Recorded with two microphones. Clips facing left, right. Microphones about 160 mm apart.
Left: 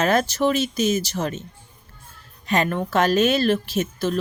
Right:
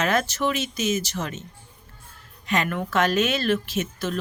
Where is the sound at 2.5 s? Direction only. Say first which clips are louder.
Left 3 dB; 35° left (ahead or behind).